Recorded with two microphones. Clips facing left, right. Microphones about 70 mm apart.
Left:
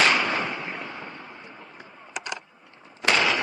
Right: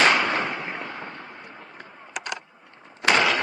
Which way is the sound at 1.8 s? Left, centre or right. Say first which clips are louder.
Right 1 dB; right.